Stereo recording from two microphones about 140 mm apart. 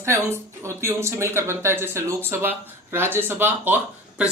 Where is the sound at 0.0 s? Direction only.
20° right (ahead or behind).